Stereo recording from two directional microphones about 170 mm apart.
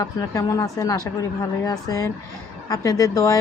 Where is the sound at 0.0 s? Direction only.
20° left (ahead or behind).